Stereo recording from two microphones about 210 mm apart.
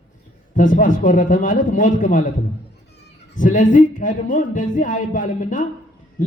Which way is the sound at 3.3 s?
40° left (ahead or behind).